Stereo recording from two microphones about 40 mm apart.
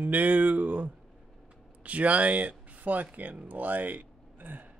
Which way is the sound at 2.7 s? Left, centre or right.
Right.